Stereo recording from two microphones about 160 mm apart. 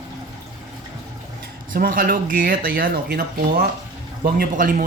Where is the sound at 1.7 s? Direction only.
65° right (ahead or behind).